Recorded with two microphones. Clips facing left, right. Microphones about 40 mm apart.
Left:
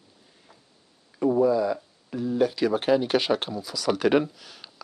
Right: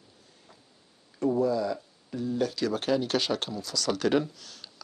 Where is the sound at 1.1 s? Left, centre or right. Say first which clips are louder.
Left 5 dB; centre.